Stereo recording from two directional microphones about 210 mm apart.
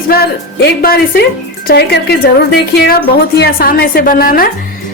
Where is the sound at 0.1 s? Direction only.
45° left (ahead or behind).